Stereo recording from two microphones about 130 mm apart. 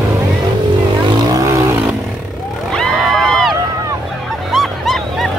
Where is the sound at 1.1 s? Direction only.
30° right (ahead or behind).